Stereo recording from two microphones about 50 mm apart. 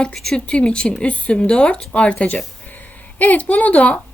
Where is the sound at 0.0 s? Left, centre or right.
Centre.